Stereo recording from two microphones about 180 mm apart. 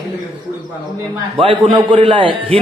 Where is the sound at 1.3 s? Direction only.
30° right (ahead or behind).